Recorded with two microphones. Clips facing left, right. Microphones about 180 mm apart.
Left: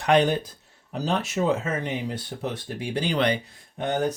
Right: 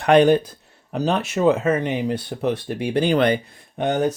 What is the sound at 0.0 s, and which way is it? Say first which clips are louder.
Speech: right 6 dB; 55° right (ahead or behind).